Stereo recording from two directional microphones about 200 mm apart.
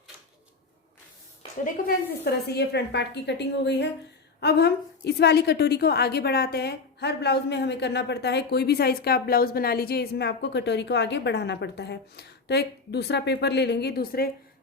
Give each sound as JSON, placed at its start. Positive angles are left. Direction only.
{"t": 1.6, "sound": "a woman's voice", "side_deg": 50}